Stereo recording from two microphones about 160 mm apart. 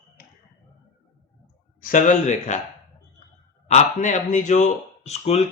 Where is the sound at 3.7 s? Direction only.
45° left (ahead or behind).